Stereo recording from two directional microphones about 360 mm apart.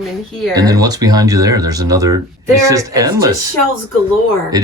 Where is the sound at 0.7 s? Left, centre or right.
Centre.